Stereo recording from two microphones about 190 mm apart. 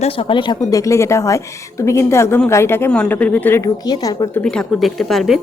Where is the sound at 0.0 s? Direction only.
25° left (ahead or behind).